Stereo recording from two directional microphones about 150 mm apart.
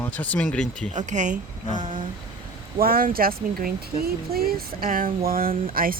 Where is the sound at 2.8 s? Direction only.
80° right.